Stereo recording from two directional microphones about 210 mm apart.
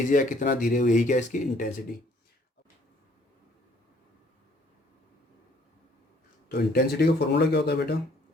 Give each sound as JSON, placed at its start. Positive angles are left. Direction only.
{"t": 0.1, "sound": "speech", "side_deg": 40}
{"t": 6.5, "sound": "speech", "side_deg": 50}